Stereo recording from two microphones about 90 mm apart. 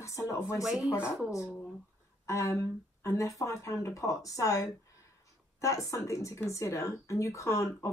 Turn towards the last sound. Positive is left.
turn(degrees=30)  # may be behind; listen again after turning